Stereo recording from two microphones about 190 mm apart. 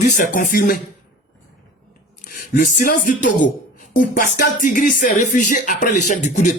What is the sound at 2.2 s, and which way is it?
Speech, 45° left (ahead or behind).